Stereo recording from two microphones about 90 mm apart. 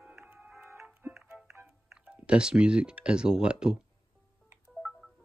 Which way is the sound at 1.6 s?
10° right (ahead or behind).